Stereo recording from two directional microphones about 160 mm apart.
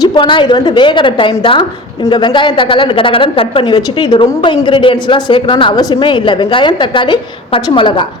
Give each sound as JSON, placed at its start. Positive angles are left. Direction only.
{"t": 0.0, "sound": "a woman's voice", "side_deg": 30}